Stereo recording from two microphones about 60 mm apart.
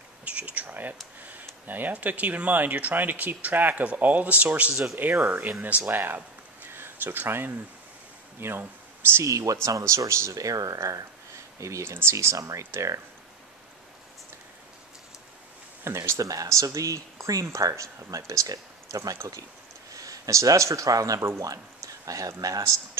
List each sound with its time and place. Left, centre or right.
0.2 s speech: right
9.2 s speech: right
11.6 s speech: right
12.4 s speech: right
16.0 s speech: right
19.9 s speech: right